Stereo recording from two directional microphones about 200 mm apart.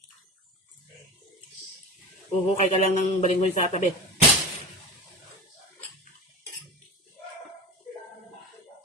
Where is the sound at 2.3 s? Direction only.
35° left (ahead or behind).